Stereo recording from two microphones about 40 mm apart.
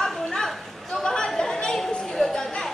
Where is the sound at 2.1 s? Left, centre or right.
Centre.